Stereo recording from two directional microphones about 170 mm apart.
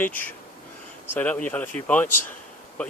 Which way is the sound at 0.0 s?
10° left (ahead or behind).